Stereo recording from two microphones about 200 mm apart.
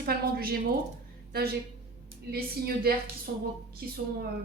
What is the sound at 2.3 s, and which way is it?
Speech, 50° right (ahead or behind).